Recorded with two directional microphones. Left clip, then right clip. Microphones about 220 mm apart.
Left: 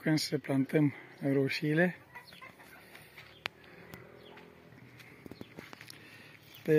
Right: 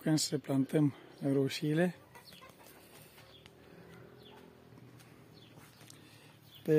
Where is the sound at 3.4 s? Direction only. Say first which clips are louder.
Left 18 dB; 50° left (ahead or behind).